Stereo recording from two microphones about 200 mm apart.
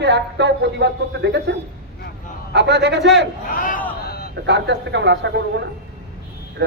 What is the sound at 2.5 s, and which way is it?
Speech, 60° right (ahead or behind).